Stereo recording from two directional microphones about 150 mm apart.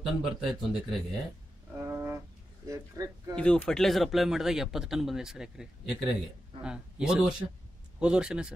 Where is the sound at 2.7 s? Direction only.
25° right (ahead or behind).